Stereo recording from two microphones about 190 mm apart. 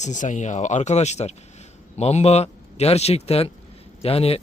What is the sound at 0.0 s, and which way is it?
Speech, 40° left (ahead or behind).